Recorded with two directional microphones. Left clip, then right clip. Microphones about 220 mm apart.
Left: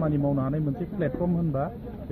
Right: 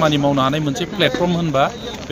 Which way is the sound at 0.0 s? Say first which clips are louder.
Right 12 dB; 10° right (ahead or behind).